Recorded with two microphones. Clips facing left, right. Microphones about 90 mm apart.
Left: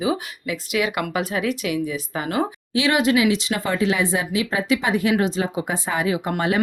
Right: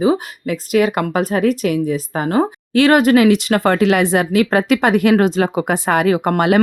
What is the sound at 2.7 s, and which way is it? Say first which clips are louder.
Speech: right 8 dB; 50° right (ahead or behind).